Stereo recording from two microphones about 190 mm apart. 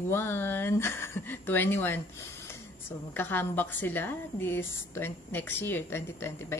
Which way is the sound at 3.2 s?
10° left (ahead or behind).